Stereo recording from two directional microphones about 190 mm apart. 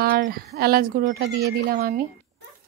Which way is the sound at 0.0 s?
50° right (ahead or behind).